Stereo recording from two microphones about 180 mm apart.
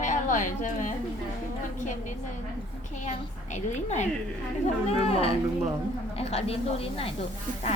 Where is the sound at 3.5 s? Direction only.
40° left (ahead or behind).